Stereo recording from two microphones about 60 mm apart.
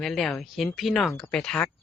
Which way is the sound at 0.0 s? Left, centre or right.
Centre.